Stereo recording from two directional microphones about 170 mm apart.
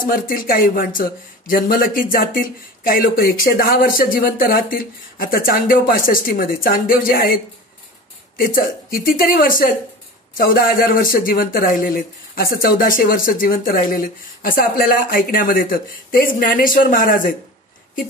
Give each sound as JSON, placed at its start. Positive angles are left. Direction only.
{"t": 0.0, "sound": "speech", "side_deg": 55}
{"t": 8.4, "sound": "speech", "side_deg": 55}